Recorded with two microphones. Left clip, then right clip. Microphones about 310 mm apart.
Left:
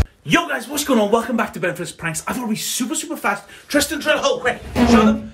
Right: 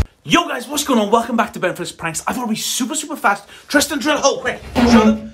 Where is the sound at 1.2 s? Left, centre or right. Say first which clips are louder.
Right 3 dB; centre.